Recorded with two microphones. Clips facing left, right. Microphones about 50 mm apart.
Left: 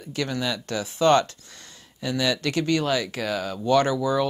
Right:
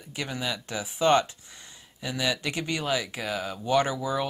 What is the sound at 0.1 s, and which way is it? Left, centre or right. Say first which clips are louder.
Speech: left 5 dB; centre.